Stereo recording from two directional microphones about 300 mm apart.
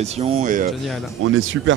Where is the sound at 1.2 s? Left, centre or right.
Right.